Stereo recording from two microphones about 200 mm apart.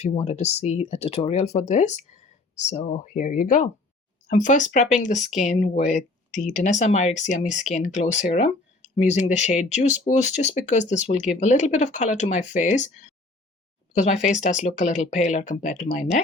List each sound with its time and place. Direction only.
0.0 s speech: 30° left (ahead or behind)